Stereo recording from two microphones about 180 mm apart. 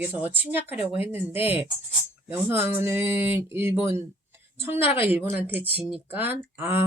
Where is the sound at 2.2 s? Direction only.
15° right (ahead or behind).